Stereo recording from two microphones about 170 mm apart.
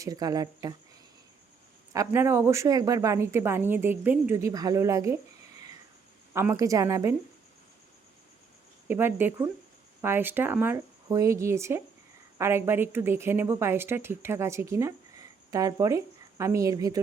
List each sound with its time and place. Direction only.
0.0 s speech: 20° right (ahead or behind)
1.9 s speech: 15° right (ahead or behind)
8.9 s a woman's voice: 10° right (ahead or behind)